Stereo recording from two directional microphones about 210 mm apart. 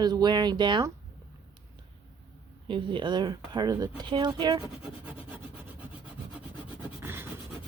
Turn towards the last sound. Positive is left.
turn(degrees=-10)  # may be behind; listen again after turning